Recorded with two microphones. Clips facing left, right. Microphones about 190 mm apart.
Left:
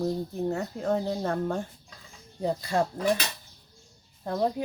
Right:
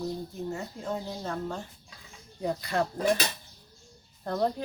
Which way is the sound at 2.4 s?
25° left (ahead or behind).